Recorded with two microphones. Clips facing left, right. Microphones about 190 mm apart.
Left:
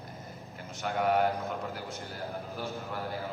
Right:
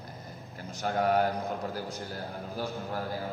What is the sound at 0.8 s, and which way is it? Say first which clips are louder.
Speech: right 1 dB; 35° right (ahead or behind).